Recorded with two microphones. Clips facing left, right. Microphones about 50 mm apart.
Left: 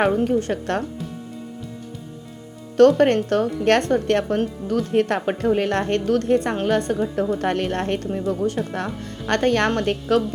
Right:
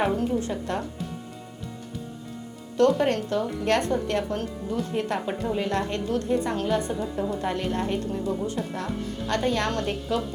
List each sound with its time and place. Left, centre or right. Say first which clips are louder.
0.3 s a woman's voice: left 5 dB; left
2.7 s a woman's voice: left 7 dB; left
5.5 s a woman's voice: left 6 dB; left
7.3 s speech: left 5 dB; left